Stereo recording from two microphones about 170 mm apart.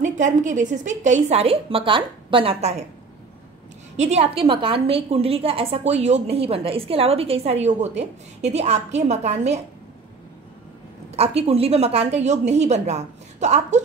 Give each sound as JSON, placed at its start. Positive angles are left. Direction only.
{"t": 0.0, "sound": "a woman's voice", "side_deg": -45}
{"t": 3.9, "sound": "a woman's voice", "side_deg": -40}
{"t": 11.1, "sound": "a woman's voice", "side_deg": -40}